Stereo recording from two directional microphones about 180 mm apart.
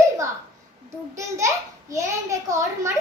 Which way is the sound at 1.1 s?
15° right (ahead or behind).